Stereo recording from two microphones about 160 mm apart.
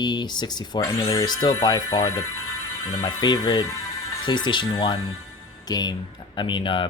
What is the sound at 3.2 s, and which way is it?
Speech, 30° left (ahead or behind).